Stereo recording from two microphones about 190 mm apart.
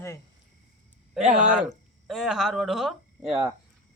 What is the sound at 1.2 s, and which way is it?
Speech, 40° right (ahead or behind).